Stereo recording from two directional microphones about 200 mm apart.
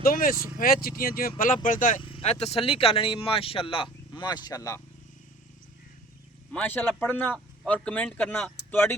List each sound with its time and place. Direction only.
0.0 s speech: 45° left (ahead or behind)
2.0 s speech: 25° left (ahead or behind)
6.5 s speech: 10° left (ahead or behind)